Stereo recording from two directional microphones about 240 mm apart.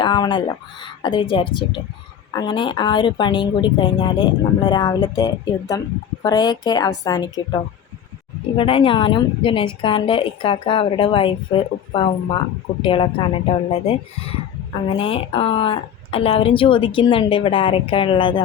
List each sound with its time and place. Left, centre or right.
0.0 s a woman's voice: centre